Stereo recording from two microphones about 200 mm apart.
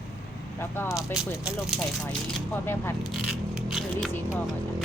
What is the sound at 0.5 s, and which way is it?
Speech, 10° left (ahead or behind).